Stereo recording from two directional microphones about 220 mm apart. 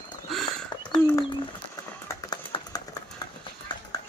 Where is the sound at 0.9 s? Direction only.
15° left (ahead or behind).